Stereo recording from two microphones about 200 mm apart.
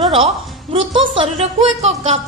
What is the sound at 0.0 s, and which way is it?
Music, 25° right (ahead or behind).